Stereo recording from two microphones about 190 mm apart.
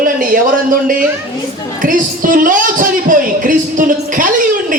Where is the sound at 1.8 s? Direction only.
45° right (ahead or behind).